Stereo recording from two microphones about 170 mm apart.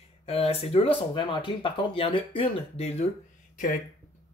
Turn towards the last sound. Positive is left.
turn(degrees=50)  # may be behind; listen again after turning